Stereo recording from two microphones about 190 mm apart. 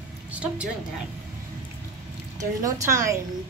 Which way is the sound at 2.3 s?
15° right (ahead or behind).